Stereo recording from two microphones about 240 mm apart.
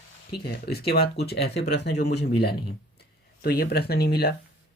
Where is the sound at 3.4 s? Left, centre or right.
Left.